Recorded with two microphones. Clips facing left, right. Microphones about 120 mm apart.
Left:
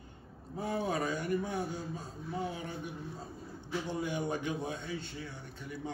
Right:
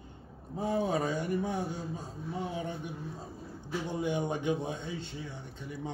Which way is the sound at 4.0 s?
25° right (ahead or behind).